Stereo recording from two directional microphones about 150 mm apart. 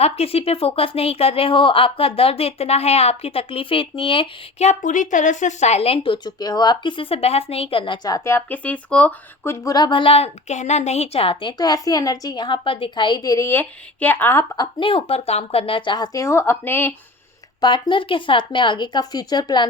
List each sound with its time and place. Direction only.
0.0 s a woman's voice: 40° left (ahead or behind); by 14.4 s 15° left (ahead or behind)
14.5 s a woman's voice: 30° left (ahead or behind); by 16.9 s 15° left (ahead or behind)
17.6 s a woman's voice: 30° left (ahead or behind)